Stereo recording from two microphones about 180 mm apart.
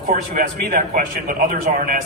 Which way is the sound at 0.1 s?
50° right (ahead or behind).